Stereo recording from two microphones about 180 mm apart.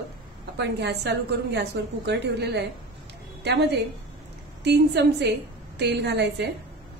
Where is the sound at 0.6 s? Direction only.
70° right (ahead or behind).